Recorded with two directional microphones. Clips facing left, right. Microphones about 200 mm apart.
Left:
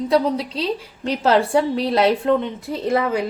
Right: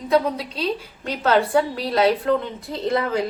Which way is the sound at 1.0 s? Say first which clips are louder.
Left 2 dB; 30° left (ahead or behind).